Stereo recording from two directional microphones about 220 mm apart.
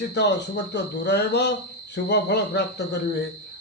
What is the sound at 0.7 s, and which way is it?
A man's voice, 50° left (ahead or behind).